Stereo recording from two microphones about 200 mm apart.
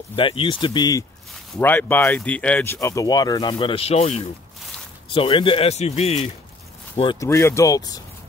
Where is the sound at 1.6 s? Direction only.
10° left (ahead or behind); by 6.3 s 30° left (ahead or behind).